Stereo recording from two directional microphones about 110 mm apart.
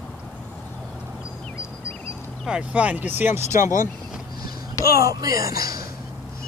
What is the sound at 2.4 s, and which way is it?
Speech, 10° right (ahead or behind).